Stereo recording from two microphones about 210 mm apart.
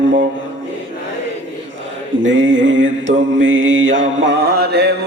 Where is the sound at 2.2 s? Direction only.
65° right (ahead or behind).